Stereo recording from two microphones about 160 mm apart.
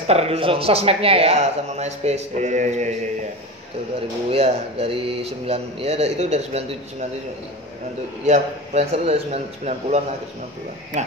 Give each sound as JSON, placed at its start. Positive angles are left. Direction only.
{"t": 0.1, "sound": "speech", "side_deg": -40}
{"t": 4.3, "sound": "speech", "side_deg": -35}
{"t": 8.3, "sound": "speech", "side_deg": -40}